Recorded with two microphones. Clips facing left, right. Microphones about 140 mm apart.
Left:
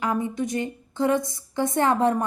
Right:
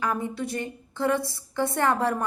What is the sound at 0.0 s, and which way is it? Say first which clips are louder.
A woman's voice: left 3 dB; 20° left (ahead or behind).